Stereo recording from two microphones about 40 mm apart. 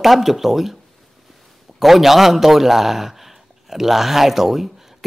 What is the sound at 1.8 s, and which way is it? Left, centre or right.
A man's voice, centre.